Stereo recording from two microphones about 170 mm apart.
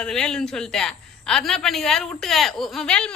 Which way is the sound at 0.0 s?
5° left (ahead or behind).